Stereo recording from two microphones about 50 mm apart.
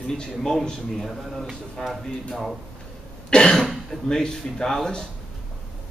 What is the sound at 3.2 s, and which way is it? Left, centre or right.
Cough, centre.